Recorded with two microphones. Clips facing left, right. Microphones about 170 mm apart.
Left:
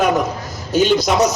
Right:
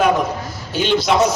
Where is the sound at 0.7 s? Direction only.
40° left (ahead or behind).